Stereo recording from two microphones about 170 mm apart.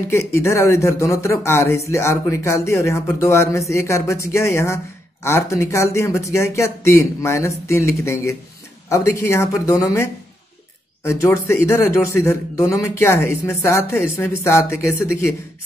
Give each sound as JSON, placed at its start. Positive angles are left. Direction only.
{"t": 0.1, "sound": "speech", "side_deg": 15}
{"t": 11.1, "sound": "speech", "side_deg": 15}